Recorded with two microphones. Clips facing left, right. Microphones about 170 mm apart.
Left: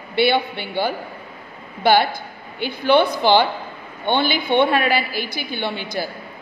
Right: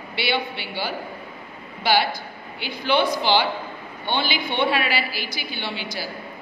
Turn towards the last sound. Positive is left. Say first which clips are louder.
# left 5 dB
turn(degrees=55)  # may be behind; listen again after turning